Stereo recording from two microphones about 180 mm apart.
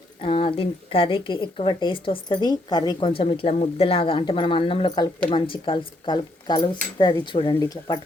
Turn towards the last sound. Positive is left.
turn(degrees=20)  # may be behind; listen again after turning